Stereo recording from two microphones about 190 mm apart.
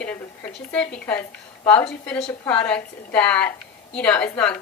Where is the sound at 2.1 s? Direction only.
5° left (ahead or behind).